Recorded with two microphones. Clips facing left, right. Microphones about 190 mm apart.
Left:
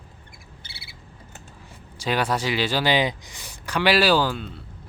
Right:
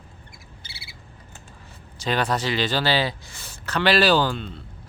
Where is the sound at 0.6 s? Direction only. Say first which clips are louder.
Even; 55° left (ahead or behind).